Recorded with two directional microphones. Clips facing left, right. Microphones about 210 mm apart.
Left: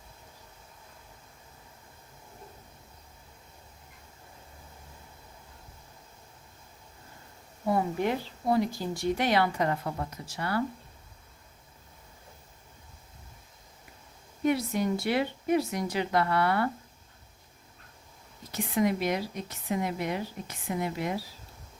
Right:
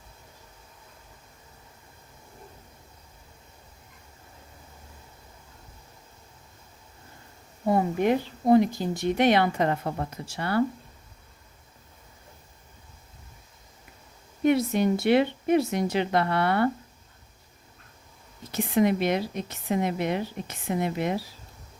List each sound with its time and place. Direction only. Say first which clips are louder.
7.6 s speech: right 4 dB; 20° right (ahead or behind)
14.4 s speech: right 5 dB; 25° right (ahead or behind)
18.5 s speech: right 4 dB; 25° right (ahead or behind)